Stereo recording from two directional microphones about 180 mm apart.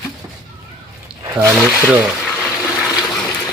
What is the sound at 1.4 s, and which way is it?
Speech, 5° right (ahead or behind).